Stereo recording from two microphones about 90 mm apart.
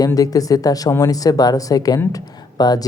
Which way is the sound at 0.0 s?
40° left (ahead or behind).